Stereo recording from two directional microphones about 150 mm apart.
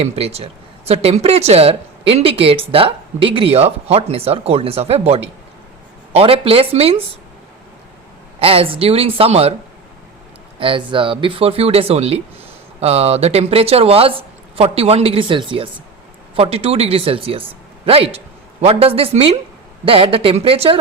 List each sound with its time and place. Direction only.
0.0 s speech: 45° right (ahead or behind)
8.4 s speech: 40° right (ahead or behind)
10.6 s speech: 35° right (ahead or behind)